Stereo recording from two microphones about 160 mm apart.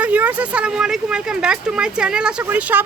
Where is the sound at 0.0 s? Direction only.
10° right (ahead or behind).